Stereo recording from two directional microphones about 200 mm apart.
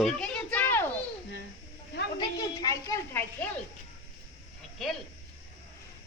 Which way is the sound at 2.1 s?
20° left (ahead or behind).